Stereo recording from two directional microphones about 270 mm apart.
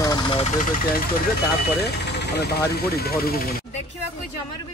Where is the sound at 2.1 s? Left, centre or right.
Left.